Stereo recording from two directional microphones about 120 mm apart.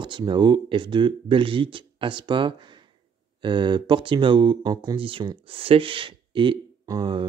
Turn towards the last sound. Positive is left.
turn(degrees=-35)  # may be behind; listen again after turning